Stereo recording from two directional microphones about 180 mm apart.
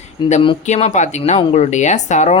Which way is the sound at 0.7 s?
40° left (ahead or behind).